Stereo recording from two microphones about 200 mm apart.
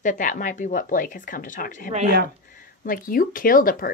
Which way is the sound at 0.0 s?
40° left (ahead or behind).